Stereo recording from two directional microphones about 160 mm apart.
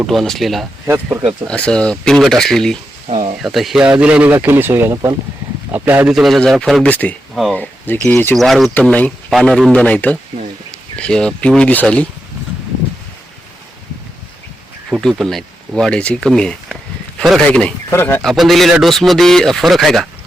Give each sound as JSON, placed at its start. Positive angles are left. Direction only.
{"t": 0.0, "sound": "a man's voice", "side_deg": 0}
{"t": 0.9, "sound": "a man's voice", "side_deg": -15}
{"t": 1.5, "sound": "a man's voice", "side_deg": 5}
{"t": 6.1, "sound": "a man's voice", "side_deg": 0}
{"t": 14.8, "sound": "a man's voice", "side_deg": 0}
{"t": 18.2, "sound": "a man's voice", "side_deg": 0}